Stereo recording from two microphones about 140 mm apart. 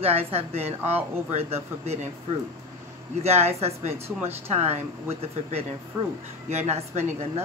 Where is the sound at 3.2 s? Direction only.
50° right (ahead or behind).